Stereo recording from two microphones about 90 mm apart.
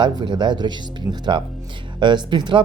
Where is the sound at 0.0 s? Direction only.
60° right (ahead or behind).